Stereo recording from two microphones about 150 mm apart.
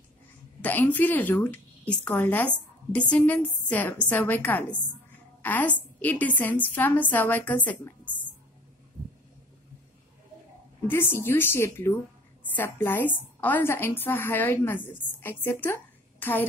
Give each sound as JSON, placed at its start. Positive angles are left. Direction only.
{"t": 0.6, "sound": "a woman's voice", "side_deg": 10}
{"t": 10.9, "sound": "a woman's voice", "side_deg": 15}